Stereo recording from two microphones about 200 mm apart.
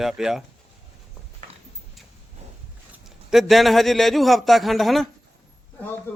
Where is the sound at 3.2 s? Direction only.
Centre (ahead or behind).